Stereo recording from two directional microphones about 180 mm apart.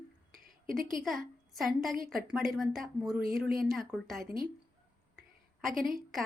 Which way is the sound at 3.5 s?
Centre (ahead or behind).